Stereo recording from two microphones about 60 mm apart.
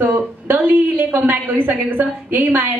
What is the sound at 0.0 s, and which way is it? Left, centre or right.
A woman's voice, right.